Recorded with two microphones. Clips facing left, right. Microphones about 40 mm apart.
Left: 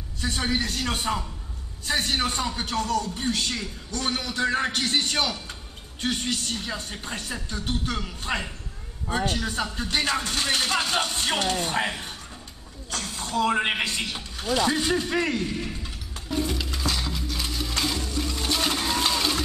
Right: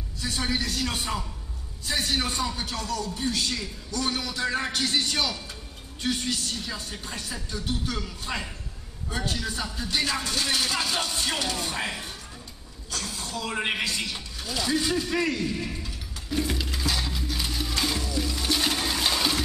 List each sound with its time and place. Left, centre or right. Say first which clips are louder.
0.2 s a man's voice: left 2 dB; left
9.1 s a man's voice: left 4 dB; left
13.6 s a man's voice: left 2 dB; left
16.5 s music: even; centre
18.3 s a sound: left 1 dB; centre
19.0 s a sound: right 2 dB; centre